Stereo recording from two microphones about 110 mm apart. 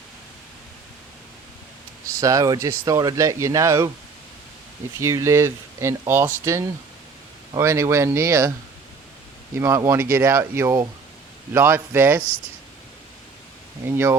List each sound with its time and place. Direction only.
2.2 s speech: 30° right (ahead or behind)
4.9 s speech: 25° right (ahead or behind)
9.6 s speech: 25° right (ahead or behind)
13.8 s speech: 20° right (ahead or behind)